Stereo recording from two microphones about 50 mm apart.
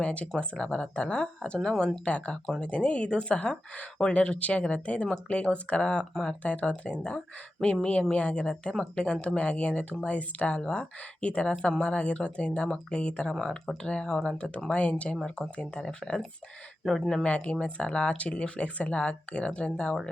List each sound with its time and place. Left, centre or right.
0.0 s speech: left; by 1.9 s centre
2.0 s speech: left
8.1 s speech: left
16.8 s speech: centre
17.2 s speech: left